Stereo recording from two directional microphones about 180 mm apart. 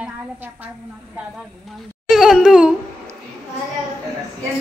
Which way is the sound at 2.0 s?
5° right (ahead or behind).